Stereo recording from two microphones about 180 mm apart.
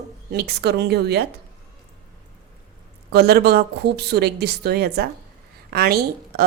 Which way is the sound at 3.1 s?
65° right (ahead or behind).